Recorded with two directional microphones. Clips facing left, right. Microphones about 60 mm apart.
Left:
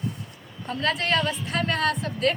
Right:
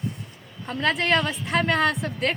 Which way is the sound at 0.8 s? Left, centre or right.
Right.